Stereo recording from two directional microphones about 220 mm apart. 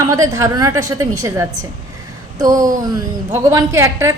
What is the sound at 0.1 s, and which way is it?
A woman's voice, 15° right (ahead or behind).